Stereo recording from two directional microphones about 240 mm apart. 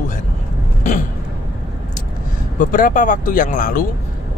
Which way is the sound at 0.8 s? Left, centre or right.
Left.